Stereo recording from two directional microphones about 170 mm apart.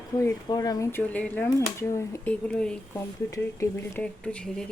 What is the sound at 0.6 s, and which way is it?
Speech, 15° left (ahead or behind).